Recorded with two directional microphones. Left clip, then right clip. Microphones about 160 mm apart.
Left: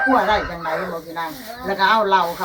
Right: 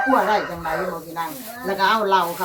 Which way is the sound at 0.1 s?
15° right (ahead or behind).